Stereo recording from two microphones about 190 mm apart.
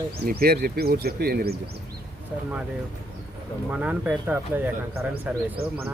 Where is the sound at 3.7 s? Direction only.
5° right (ahead or behind).